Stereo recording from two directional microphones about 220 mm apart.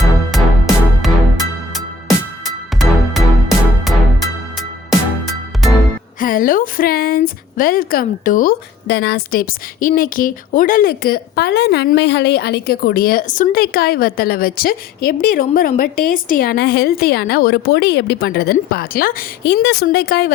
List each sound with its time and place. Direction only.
0.3 s music: centre (ahead or behind)
1.7 s music: centre (ahead or behind)
6.1 s a woman's voice: 40° left (ahead or behind)